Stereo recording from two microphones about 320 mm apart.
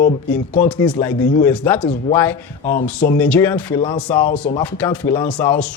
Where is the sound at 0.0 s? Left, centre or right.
Left.